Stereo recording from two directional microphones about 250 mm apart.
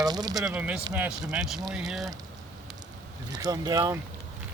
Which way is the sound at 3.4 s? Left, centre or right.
Centre.